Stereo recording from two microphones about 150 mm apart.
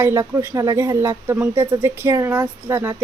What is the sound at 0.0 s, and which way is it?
Speech, 20° right (ahead or behind).